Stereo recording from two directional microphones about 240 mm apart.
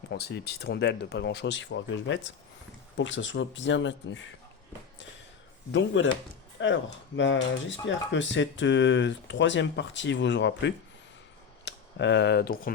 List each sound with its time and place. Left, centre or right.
0.1 s speech: left
5.7 s speech: left